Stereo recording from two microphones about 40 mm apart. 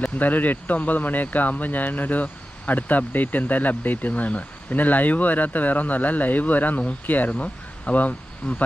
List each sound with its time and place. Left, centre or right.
0.2 s speech: left